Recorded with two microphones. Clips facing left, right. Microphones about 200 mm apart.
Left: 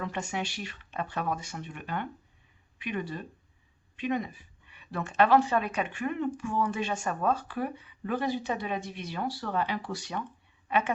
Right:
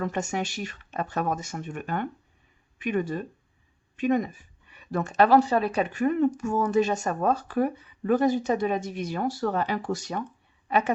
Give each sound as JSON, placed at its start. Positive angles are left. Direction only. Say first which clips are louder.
{"t": 0.0, "sound": "a woman's voice", "louder": "right 5 dB", "side_deg": -45}